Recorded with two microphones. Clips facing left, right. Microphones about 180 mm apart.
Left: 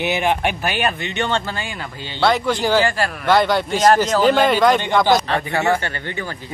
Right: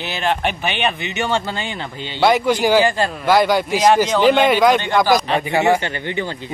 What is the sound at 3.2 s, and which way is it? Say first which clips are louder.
Speech: right 1 dB; 10° right (ahead or behind).